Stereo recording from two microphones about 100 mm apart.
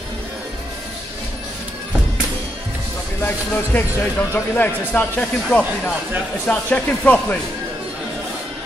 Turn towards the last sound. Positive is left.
turn(degrees=15)  # may be behind; listen again after turning